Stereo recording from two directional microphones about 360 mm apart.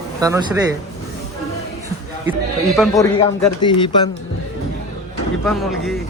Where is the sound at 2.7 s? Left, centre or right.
Centre.